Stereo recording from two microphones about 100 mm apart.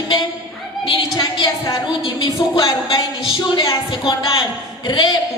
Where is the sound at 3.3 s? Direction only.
50° left (ahead or behind).